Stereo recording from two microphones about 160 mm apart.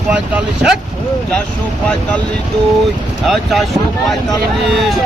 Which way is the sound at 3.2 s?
Centre (ahead or behind).